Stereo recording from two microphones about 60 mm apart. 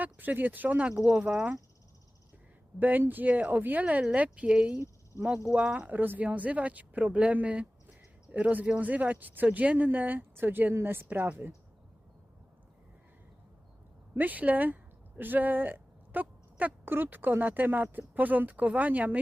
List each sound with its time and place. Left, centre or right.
0.0 s speech: right
1.0 s speech: centre
2.7 s speech: right
14.2 s speech: right
15.2 s a sound: right
16.8 s speech: right